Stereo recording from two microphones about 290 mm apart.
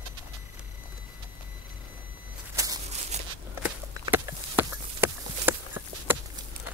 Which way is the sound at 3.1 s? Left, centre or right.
Right.